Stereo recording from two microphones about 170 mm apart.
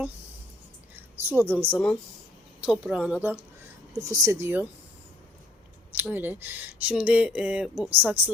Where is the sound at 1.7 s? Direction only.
5° left (ahead or behind); by 4.6 s 15° right (ahead or behind).